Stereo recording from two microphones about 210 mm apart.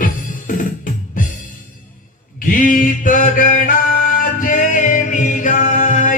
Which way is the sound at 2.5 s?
40° left (ahead or behind).